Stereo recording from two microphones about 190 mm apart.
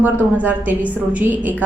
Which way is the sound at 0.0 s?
10° right (ahead or behind).